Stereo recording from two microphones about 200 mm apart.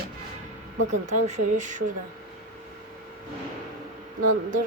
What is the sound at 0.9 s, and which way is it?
Speech, 35° right (ahead or behind).